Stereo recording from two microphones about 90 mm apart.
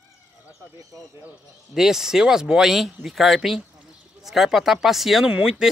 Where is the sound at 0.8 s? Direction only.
35° right (ahead or behind).